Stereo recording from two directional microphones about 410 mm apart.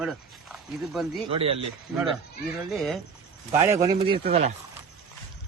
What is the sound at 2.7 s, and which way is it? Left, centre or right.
A man's voice, centre.